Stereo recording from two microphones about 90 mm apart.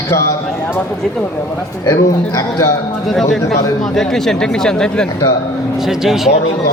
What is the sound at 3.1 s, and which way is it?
Speech, 5° left (ahead or behind).